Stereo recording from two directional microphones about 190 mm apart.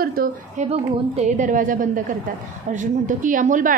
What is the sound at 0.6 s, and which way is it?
A woman's voice, 35° right (ahead or behind).